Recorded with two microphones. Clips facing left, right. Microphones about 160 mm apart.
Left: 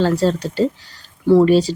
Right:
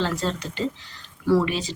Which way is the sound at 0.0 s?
40° left (ahead or behind).